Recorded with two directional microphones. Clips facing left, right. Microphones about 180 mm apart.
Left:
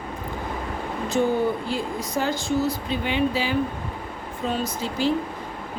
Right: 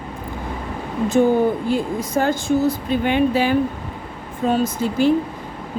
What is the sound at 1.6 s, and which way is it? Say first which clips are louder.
Speech: right 6 dB; 50° right (ahead or behind).